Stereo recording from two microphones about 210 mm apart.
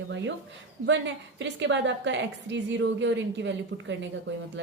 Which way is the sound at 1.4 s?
60° right (ahead or behind).